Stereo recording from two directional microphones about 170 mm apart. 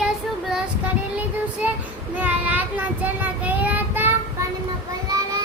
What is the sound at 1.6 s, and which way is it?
Child singing, 10° right (ahead or behind).